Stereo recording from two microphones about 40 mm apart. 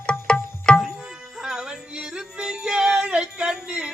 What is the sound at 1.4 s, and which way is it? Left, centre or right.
Music, centre.